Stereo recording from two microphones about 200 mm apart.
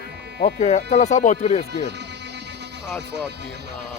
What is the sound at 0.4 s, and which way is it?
Speech, 35° left (ahead or behind).